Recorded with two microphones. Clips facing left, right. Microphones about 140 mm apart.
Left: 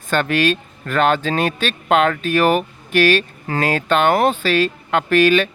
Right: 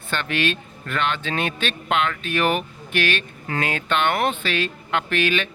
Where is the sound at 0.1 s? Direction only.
45° left (ahead or behind).